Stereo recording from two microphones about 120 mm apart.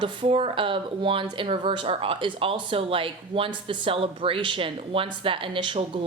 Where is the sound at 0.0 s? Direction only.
45° right (ahead or behind).